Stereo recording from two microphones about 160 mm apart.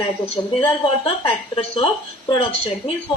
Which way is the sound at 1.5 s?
30° left (ahead or behind).